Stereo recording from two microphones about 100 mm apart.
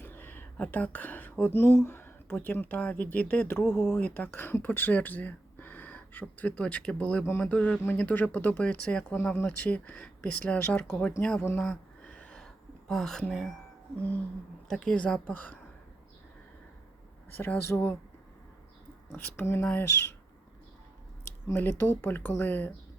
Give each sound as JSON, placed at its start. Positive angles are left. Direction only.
{"t": 0.0, "sound": "a sound", "side_deg": 20}
{"t": 2.3, "sound": "speech", "side_deg": 20}
{"t": 3.7, "sound": "speech", "side_deg": -5}
{"t": 4.0, "sound": "speech", "side_deg": 15}
{"t": 11.6, "sound": "a sound", "side_deg": 5}
{"t": 12.9, "sound": "speech", "side_deg": 5}
{"t": 14.7, "sound": "speech", "side_deg": 5}
{"t": 17.3, "sound": "speech", "side_deg": 20}
{"t": 19.1, "sound": "speech", "side_deg": 20}
{"t": 21.4, "sound": "speech", "side_deg": 20}